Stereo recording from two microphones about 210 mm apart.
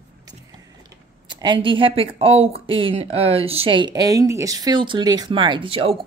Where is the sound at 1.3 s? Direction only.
20° right (ahead or behind).